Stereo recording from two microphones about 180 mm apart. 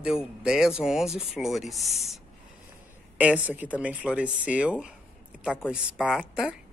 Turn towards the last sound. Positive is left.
turn(degrees=-5)  # may be behind; listen again after turning